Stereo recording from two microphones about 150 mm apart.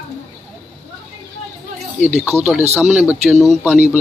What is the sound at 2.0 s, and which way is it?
Speech, 45° right (ahead or behind).